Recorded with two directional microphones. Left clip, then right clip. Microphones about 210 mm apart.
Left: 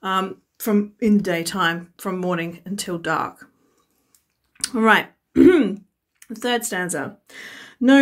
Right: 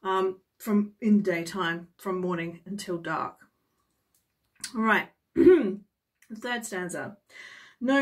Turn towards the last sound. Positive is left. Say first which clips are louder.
# left 10 dB
turn(degrees=50)  # may be behind; listen again after turning